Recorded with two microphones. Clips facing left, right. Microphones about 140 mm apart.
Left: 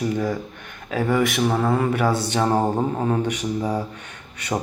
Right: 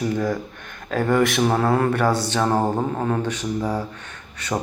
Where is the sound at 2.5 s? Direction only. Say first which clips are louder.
Even; centre (ahead or behind).